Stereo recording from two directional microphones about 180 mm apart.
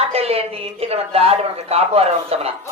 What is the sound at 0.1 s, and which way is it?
A man's voice, 35° right (ahead or behind).